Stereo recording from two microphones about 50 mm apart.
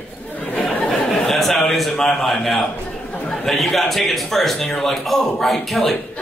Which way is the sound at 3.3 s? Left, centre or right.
Centre.